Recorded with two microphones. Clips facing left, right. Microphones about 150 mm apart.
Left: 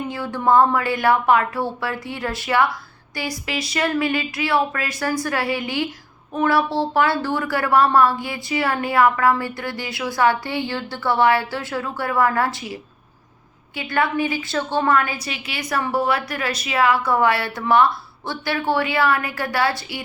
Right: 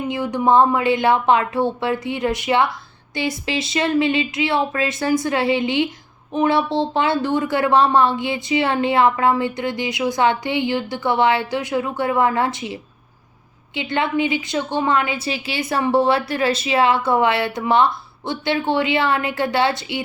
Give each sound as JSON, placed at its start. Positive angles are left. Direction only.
{"t": 0.1, "sound": "speech", "side_deg": -20}